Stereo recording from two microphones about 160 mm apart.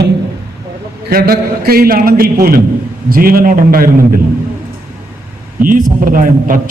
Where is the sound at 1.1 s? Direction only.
70° right (ahead or behind).